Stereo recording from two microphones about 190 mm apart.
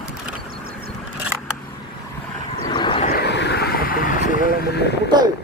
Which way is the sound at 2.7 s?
25° left (ahead or behind).